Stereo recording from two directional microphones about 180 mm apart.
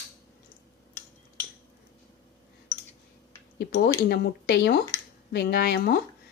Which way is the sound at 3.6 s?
65° left (ahead or behind).